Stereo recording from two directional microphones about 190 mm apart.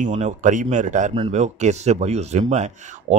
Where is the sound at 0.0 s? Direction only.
40° right (ahead or behind).